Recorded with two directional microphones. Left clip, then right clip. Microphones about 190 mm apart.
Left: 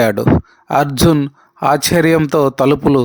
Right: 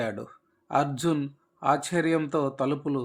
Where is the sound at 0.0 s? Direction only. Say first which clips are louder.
Left 19 dB; 45° left (ahead or behind).